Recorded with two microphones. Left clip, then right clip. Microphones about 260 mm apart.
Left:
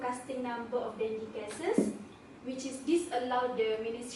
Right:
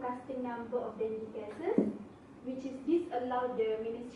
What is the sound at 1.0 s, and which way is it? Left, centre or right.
A woman's voice, centre.